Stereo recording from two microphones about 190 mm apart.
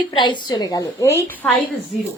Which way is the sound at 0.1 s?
25° left (ahead or behind).